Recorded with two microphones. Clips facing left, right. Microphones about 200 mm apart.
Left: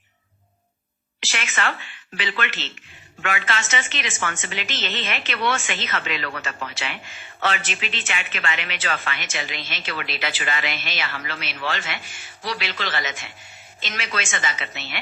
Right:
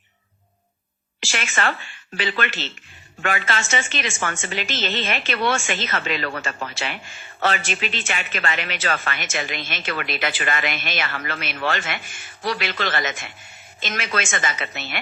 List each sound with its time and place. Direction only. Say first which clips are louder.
1.2 s a woman's voice: right 2 dB; 45° right (ahead or behind)